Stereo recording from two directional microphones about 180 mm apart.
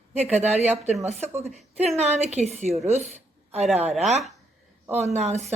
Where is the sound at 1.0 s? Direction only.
40° right (ahead or behind).